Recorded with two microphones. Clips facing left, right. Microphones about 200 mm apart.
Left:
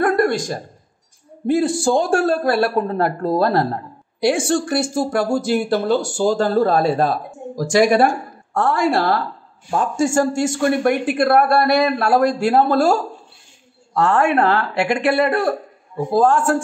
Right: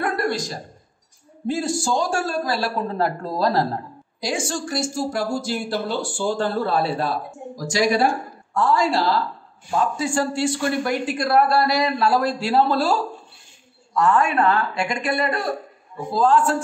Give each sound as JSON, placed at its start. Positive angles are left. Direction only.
{"t": 0.0, "sound": "a sound", "side_deg": 50}
{"t": 1.5, "sound": "speech", "side_deg": 55}
{"t": 9.9, "sound": "speech", "side_deg": 45}
{"t": 13.9, "sound": "speech", "side_deg": 70}
{"t": 16.1, "sound": "speech", "side_deg": 50}